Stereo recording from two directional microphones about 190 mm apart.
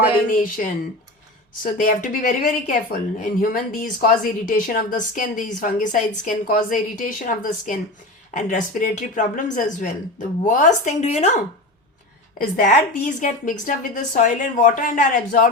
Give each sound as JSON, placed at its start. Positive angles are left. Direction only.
{"t": 0.3, "sound": "speech", "side_deg": 45}
{"t": 12.4, "sound": "speech", "side_deg": 45}